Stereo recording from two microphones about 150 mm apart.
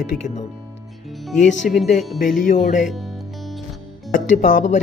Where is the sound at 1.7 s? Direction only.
65° left (ahead or behind).